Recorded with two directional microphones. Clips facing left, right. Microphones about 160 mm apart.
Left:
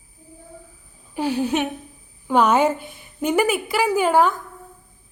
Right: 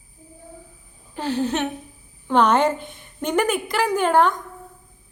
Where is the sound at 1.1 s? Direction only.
10° left (ahead or behind).